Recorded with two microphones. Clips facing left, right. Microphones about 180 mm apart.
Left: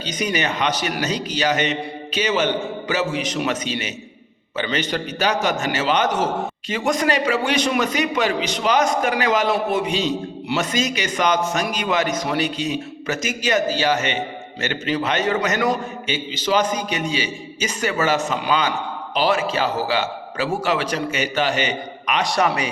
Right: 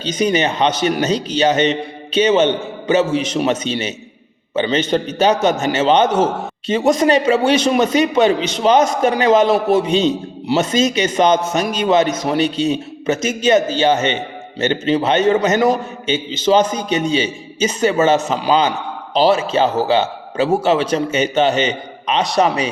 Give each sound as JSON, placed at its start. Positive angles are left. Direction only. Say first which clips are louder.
{"t": 0.0, "sound": "a man's voice", "louder": "right 7 dB", "side_deg": -25}